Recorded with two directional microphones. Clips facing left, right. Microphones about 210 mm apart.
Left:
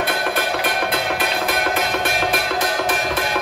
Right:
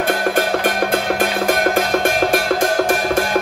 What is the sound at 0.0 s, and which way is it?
Music, 45° right (ahead or behind).